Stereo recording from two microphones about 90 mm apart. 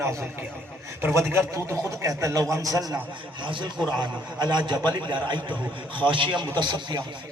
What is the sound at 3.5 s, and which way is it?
A man's voice, 60° right (ahead or behind).